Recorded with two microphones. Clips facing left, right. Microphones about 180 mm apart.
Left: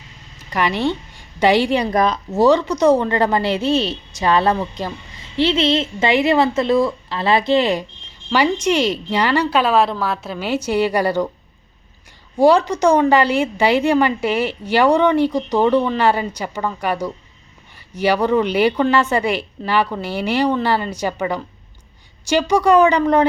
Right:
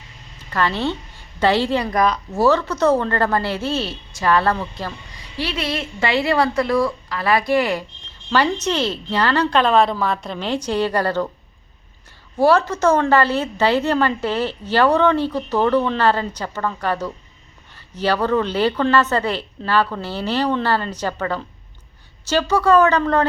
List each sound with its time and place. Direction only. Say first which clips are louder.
0.5 s a woman's voice: left 2 dB; 15° left (ahead or behind)
12.4 s a woman's voice: left 2 dB; 15° left (ahead or behind)